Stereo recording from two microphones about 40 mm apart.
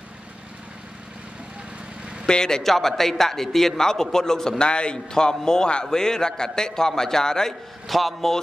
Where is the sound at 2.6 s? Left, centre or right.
Centre.